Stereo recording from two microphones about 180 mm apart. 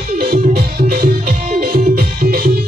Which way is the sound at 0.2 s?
55° right (ahead or behind).